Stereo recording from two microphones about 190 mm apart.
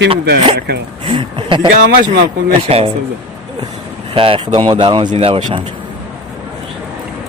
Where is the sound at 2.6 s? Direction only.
30° right (ahead or behind).